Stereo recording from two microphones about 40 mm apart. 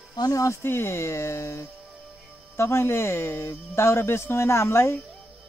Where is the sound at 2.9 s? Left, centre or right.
Left.